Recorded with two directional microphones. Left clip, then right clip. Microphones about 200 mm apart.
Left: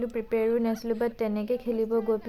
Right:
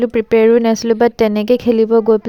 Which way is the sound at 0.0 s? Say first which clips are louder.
Right 16 dB; 45° right (ahead or behind).